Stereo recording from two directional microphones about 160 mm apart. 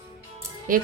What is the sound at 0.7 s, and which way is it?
Speech, 60° right (ahead or behind).